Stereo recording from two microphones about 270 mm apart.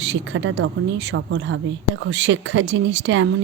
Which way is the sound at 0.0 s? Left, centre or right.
Right.